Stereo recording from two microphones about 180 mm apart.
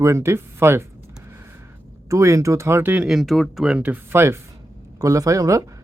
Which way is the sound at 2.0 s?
15° right (ahead or behind).